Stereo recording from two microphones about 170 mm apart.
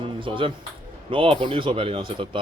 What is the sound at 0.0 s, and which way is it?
Music, 30° right (ahead or behind).